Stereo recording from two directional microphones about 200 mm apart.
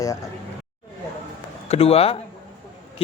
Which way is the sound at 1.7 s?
30° left (ahead or behind).